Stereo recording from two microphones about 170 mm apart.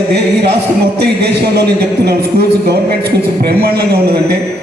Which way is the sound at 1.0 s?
65° right (ahead or behind).